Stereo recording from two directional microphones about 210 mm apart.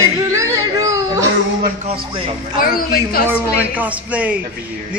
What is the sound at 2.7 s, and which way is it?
Speech, 45° left (ahead or behind).